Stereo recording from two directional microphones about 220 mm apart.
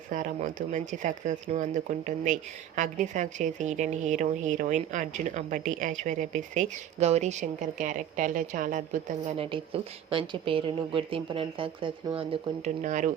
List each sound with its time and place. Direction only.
0.1 s speech: 35° right (ahead or behind)